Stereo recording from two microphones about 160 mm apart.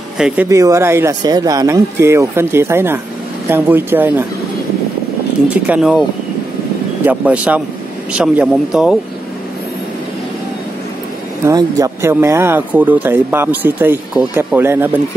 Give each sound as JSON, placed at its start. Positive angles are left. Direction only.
{"t": 0.5, "sound": "speech", "side_deg": -20}
{"t": 5.5, "sound": "speech", "side_deg": -5}
{"t": 7.1, "sound": "speech", "side_deg": -10}
{"t": 11.4, "sound": "speech", "side_deg": -20}